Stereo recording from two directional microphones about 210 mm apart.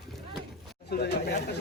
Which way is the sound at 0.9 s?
50° left (ahead or behind).